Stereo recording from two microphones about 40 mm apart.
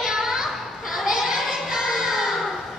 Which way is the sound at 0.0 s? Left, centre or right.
Centre.